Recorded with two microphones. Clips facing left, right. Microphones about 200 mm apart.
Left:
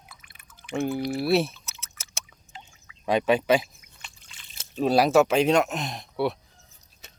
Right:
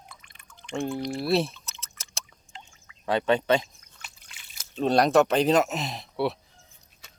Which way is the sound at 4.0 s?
10° right (ahead or behind).